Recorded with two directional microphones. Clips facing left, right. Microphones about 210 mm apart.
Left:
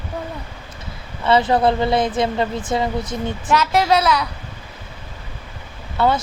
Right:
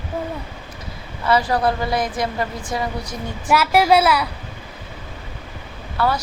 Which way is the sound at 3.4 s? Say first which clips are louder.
Right 2 dB; 10° right (ahead or behind).